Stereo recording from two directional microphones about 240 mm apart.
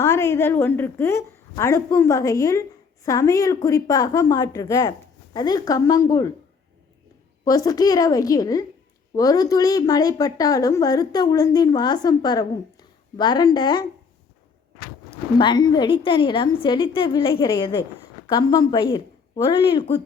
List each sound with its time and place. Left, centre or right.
0.0 s a woman's voice: centre
7.4 s a woman's voice: centre
15.4 s a woman's voice: centre